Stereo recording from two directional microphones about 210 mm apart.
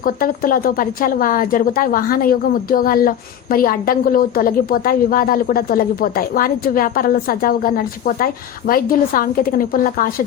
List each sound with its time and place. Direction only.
0.0 s a woman's voice: 40° left (ahead or behind)